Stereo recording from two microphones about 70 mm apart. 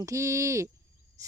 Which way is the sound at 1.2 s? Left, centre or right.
Right.